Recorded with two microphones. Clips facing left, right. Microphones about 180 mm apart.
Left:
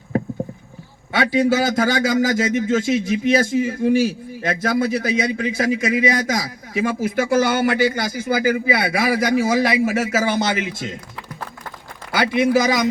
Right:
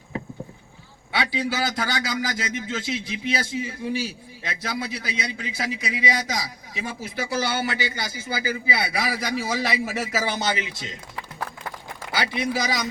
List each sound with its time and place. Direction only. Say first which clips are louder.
1.1 s a man's voice: left 9 dB; 45° left (ahead or behind)
12.1 s a man's voice: left 9 dB; 50° left (ahead or behind)